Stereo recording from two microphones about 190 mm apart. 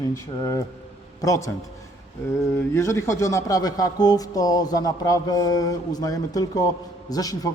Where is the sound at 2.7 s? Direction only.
15° left (ahead or behind).